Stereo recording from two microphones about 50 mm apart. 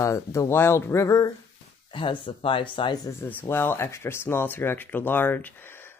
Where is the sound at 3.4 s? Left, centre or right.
Left.